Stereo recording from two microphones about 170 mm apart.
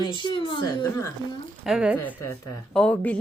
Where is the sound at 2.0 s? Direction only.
10° left (ahead or behind).